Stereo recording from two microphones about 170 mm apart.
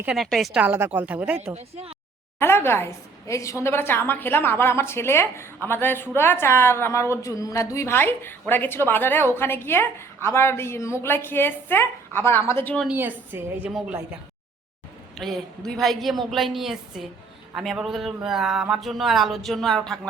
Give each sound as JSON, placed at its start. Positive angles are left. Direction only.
{"t": 0.0, "sound": "speech", "side_deg": 0}
{"t": 1.5, "sound": "speech", "side_deg": -35}
{"t": 2.4, "sound": "a woman's voice", "side_deg": 15}
{"t": 12.8, "sound": "speech", "side_deg": -10}
{"t": 15.2, "sound": "speech", "side_deg": 0}